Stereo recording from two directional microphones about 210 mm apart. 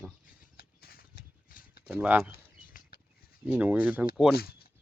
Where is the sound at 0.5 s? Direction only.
45° left (ahead or behind).